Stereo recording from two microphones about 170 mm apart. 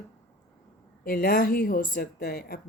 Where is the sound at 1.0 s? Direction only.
60° left (ahead or behind).